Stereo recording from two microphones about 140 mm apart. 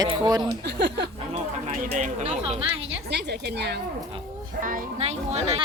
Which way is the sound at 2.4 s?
40° right (ahead or behind).